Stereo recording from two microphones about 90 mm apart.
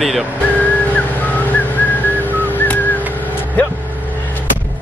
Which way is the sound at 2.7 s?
20° left (ahead or behind).